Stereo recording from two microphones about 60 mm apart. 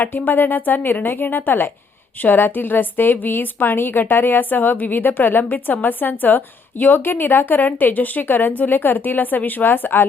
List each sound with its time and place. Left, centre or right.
0.0 s a woman's voice: left